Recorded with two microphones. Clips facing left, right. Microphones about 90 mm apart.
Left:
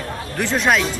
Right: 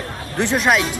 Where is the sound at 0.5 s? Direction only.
5° right (ahead or behind).